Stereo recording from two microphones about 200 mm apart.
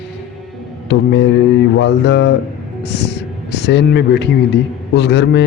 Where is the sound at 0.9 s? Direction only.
60° left (ahead or behind).